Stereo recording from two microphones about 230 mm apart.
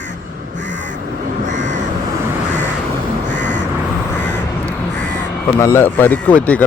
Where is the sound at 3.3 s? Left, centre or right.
Right.